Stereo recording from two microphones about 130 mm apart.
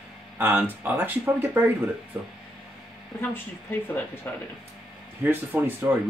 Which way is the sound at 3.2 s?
15° left (ahead or behind).